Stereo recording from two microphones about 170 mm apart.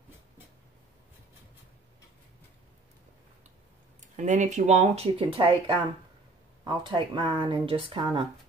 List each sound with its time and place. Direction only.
4.0 s speech: 45° right (ahead or behind)
5.2 s speech: 30° right (ahead or behind)